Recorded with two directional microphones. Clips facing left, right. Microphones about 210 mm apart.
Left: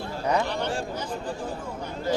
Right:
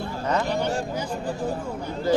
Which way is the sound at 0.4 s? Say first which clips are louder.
Right 4 dB; 15° right (ahead or behind).